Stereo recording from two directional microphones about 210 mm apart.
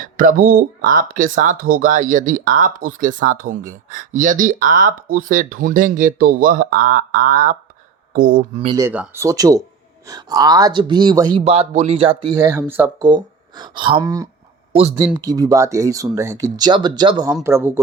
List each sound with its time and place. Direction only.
0.0 s speech: 40° right (ahead or behind)
8.5 s speech: 25° right (ahead or behind)
8.8 s speech: 10° right (ahead or behind)